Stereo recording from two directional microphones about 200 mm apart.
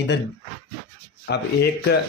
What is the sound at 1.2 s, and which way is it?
Speech, 55° left (ahead or behind).